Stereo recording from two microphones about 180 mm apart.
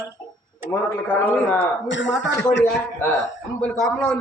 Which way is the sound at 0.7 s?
15° left (ahead or behind).